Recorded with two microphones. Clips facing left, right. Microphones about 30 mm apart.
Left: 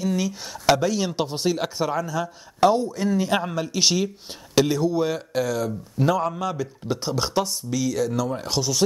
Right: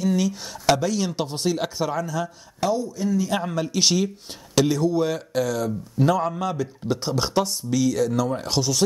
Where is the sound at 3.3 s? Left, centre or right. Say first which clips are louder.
Even; centre.